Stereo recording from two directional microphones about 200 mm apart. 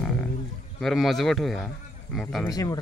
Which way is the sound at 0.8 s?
Centre (ahead or behind).